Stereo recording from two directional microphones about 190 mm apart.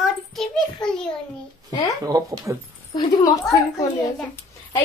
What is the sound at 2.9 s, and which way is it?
Speech, 25° left (ahead or behind).